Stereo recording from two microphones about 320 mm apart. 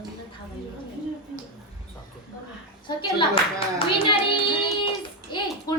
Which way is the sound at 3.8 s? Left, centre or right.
Centre.